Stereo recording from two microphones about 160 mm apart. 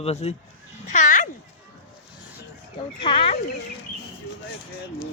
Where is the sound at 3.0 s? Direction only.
35° left (ahead or behind).